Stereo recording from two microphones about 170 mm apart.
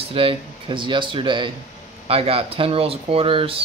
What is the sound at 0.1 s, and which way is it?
Speech, 30° right (ahead or behind).